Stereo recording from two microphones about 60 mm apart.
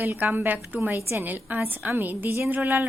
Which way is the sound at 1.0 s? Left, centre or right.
Right.